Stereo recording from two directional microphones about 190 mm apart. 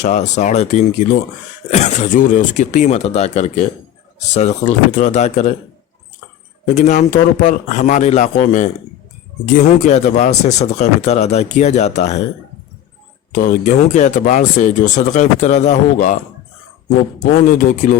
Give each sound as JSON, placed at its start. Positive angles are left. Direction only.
{"t": 0.0, "sound": "speech", "side_deg": 40}
{"t": 6.7, "sound": "speech", "side_deg": 40}
{"t": 9.8, "sound": "speech", "side_deg": 40}
{"t": 13.4, "sound": "speech", "side_deg": 45}
{"t": 17.4, "sound": "speech", "side_deg": 45}